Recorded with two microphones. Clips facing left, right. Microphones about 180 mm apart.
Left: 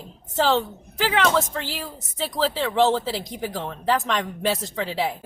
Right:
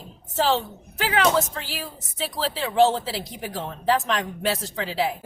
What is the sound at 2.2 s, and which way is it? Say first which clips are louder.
Speech: left 3 dB; centre (ahead or behind).